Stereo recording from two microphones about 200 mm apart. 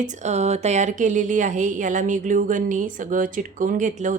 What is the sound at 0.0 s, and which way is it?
A woman's voice, 35° right (ahead or behind).